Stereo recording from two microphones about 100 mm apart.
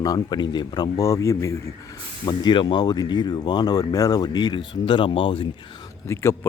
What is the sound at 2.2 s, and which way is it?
Speech, 50° left (ahead or behind).